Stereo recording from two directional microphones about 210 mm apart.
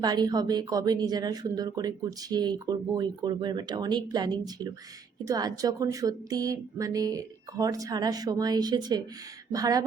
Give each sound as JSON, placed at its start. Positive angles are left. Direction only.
{"t": 0.0, "sound": "speech", "side_deg": -20}